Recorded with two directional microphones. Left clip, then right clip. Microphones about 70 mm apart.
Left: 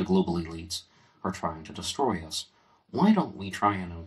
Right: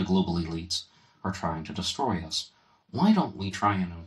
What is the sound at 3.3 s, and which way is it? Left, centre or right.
Speech, right.